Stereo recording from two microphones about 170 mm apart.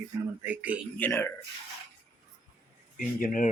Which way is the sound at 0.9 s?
10° left (ahead or behind).